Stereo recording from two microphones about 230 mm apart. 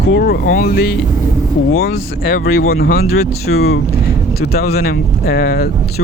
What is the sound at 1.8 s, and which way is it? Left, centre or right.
Speech, left.